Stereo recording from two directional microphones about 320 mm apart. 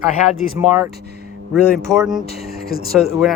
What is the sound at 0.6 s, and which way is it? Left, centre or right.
Speech, centre.